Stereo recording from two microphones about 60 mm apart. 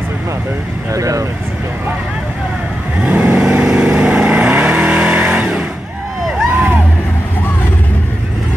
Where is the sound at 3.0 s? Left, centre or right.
Right.